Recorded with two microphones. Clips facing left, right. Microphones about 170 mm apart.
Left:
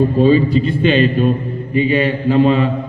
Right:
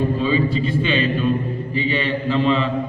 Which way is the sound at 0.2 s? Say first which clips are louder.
Left 8 dB; 45° left (ahead or behind).